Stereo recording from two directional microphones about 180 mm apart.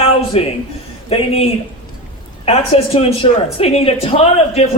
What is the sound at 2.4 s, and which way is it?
Speech, 35° left (ahead or behind).